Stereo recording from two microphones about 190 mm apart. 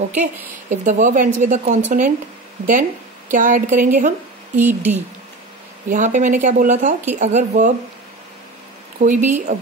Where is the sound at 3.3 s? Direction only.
45° right (ahead or behind).